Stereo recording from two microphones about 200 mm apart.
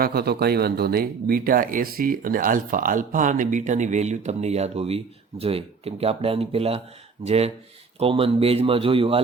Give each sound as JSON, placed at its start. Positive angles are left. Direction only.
{"t": 0.0, "sound": "speech", "side_deg": -50}